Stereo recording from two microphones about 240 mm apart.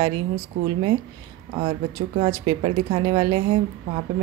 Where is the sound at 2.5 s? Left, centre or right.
Right.